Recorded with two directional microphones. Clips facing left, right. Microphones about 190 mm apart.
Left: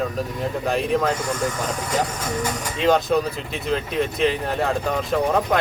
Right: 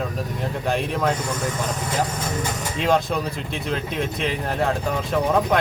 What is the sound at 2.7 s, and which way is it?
Speech, centre (ahead or behind).